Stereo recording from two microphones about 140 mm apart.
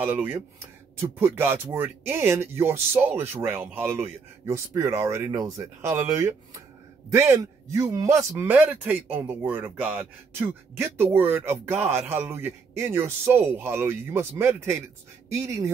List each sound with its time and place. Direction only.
0.0 s speech: 15° right (ahead or behind)